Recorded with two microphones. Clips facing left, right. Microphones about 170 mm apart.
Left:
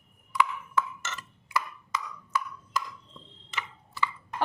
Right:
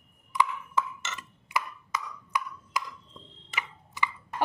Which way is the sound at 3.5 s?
15° right (ahead or behind).